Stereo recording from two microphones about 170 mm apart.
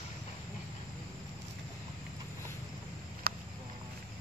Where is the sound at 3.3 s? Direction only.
60° right (ahead or behind).